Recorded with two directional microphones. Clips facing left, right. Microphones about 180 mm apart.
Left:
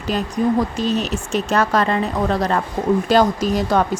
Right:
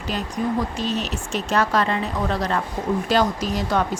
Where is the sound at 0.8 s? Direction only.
45° left (ahead or behind).